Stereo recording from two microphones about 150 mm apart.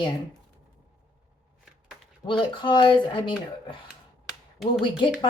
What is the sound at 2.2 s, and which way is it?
Speech, 30° left (ahead or behind).